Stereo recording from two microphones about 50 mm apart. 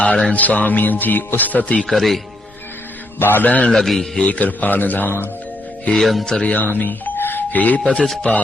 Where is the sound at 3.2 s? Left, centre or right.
Left.